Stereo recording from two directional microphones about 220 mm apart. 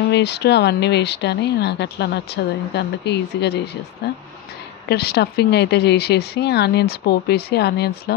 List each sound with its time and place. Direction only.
0.1 s speech: 50° left (ahead or behind)